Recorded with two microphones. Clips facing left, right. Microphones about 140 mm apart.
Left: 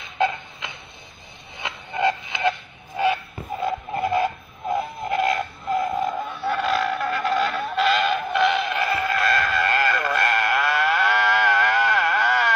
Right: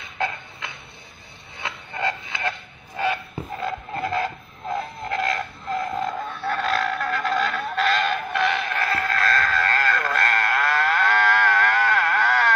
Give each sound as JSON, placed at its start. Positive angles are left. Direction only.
{"t": 1.6, "sound": "a sound", "side_deg": 20}
{"t": 3.6, "sound": "radio", "side_deg": 15}
{"t": 8.8, "sound": "sheep", "side_deg": 10}